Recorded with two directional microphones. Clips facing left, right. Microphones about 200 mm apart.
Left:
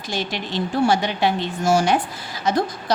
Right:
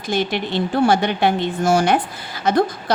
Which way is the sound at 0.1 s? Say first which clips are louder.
Right 6 dB; 55° right (ahead or behind).